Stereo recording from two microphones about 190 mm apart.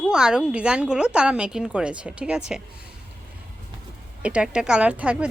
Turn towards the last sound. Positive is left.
turn(degrees=-5)  # may be behind; listen again after turning